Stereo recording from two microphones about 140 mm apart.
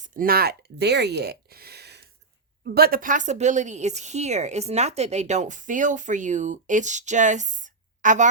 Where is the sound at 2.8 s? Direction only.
90° right.